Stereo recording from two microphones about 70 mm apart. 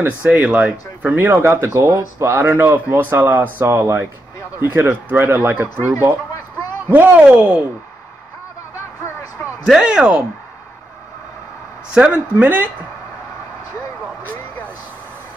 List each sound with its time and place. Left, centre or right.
0.4 s speech: right
1.7 s speech: right
2.3 s speech: right
9.8 s speech: centre
11.9 s speech: centre